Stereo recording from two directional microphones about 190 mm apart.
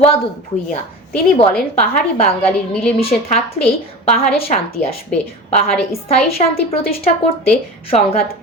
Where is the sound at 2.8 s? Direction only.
30° left (ahead or behind).